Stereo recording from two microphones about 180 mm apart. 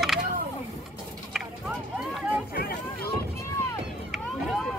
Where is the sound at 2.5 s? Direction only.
55° left (ahead or behind).